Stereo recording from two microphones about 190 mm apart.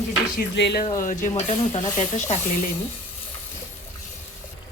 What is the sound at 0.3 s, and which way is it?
Speech, 60° left (ahead or behind).